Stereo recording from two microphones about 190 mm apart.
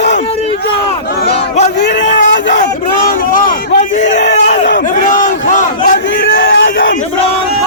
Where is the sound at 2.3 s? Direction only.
70° left (ahead or behind).